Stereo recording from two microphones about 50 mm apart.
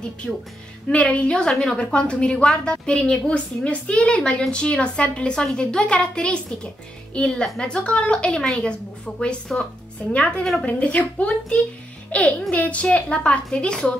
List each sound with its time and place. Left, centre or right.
0.2 s a woman's voice: centre